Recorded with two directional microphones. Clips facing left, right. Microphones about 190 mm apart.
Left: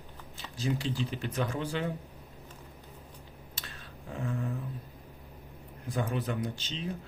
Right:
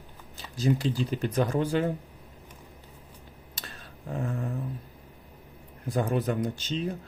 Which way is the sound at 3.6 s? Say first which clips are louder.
Right 4 dB; 40° right (ahead or behind).